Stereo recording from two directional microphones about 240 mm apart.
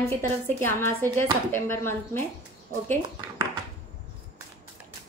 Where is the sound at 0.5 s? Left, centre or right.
Centre.